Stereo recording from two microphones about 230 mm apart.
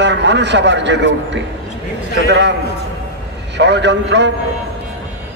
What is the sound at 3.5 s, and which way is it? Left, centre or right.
Speech, right.